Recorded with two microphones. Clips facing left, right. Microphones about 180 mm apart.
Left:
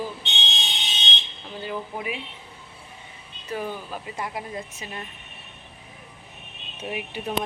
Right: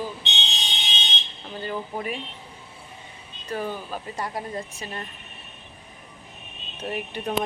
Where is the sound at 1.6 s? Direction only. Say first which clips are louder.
Right 1 dB; 10° left (ahead or behind).